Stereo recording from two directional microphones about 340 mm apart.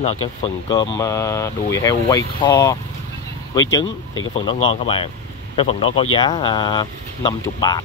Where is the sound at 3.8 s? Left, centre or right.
Left.